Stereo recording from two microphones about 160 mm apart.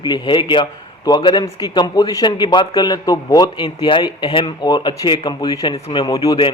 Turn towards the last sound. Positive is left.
turn(degrees=25)  # may be behind; listen again after turning